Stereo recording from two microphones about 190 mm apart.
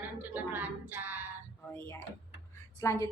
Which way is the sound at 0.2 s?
10° right (ahead or behind).